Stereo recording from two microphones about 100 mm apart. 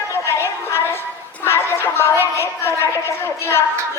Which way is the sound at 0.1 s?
25° left (ahead or behind).